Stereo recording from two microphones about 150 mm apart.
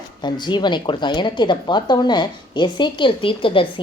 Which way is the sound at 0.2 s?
30° left (ahead or behind).